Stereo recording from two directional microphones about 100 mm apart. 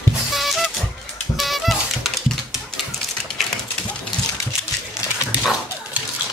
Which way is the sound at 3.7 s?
15° left (ahead or behind).